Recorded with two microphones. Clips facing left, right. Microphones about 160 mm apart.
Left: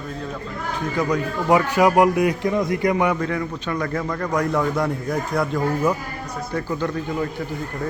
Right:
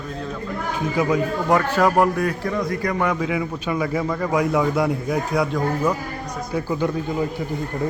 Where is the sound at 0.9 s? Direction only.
5° right (ahead or behind).